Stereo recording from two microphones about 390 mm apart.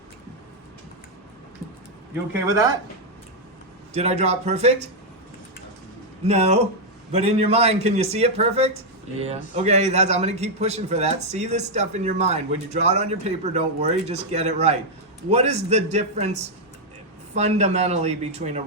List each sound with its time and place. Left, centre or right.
2.5 s speech: centre
3.9 s speech: centre
6.2 s speech: centre